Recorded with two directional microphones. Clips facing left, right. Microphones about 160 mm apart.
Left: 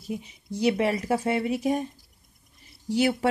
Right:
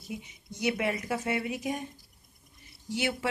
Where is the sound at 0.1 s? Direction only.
35° left (ahead or behind).